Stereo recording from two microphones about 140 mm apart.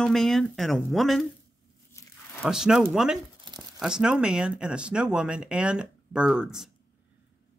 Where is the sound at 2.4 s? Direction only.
5° right (ahead or behind).